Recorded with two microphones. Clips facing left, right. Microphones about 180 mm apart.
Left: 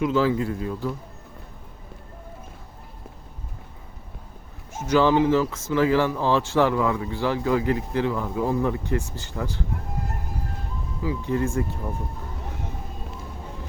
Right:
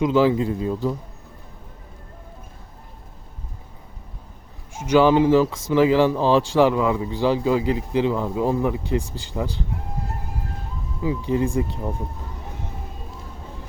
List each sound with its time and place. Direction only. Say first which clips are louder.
0.0 s speech: right 4 dB; 20° right (ahead or behind)
4.7 s speech: right 3 dB; 10° right (ahead or behind)
11.2 s speech: right 3 dB; 15° right (ahead or behind)